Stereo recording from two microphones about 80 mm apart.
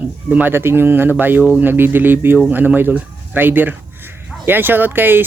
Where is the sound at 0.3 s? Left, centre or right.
Right.